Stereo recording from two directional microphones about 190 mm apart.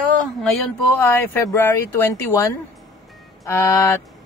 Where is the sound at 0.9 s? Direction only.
10° left (ahead or behind).